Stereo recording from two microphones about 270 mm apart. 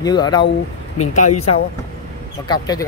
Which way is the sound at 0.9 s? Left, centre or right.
Left.